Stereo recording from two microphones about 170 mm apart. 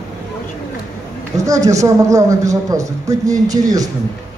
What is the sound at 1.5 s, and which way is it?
A woman's voice, 20° right (ahead or behind).